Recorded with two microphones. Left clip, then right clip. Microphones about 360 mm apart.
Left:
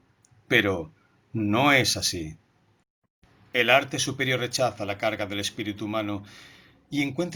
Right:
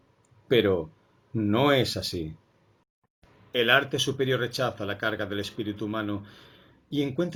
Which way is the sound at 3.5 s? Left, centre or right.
Centre.